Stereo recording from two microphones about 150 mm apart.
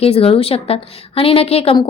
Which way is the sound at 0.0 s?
40° left (ahead or behind).